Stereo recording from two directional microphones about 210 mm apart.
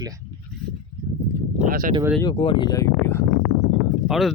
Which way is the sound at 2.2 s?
25° left (ahead or behind).